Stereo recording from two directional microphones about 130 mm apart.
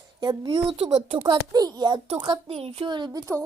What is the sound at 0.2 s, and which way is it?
Speech, 40° right (ahead or behind).